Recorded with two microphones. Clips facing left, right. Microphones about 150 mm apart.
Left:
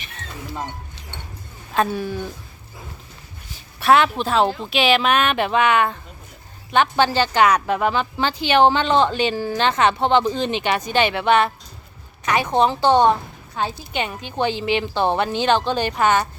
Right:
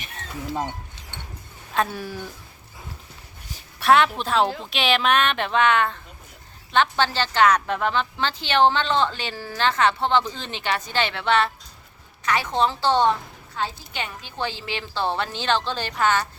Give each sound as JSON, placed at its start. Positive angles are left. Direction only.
{"t": 1.7, "sound": "speech", "side_deg": 0}
{"t": 3.8, "sound": "a woman's voice", "side_deg": 0}